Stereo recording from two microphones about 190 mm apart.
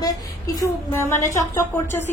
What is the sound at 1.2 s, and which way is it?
Speech, 15° left (ahead or behind).